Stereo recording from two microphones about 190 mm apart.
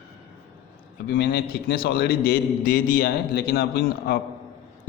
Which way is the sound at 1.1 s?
60° left (ahead or behind).